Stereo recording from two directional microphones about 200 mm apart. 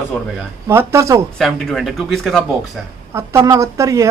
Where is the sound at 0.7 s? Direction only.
15° right (ahead or behind).